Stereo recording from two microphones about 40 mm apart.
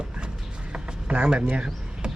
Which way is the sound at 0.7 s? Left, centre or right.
Right.